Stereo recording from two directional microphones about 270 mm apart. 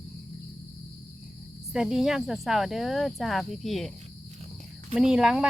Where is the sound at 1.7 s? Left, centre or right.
Centre.